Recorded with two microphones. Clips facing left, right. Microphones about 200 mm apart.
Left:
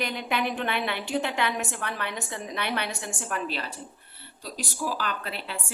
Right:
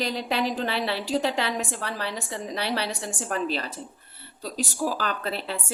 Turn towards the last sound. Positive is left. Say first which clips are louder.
# right 5 dB
turn(degrees=-40)  # may be behind; listen again after turning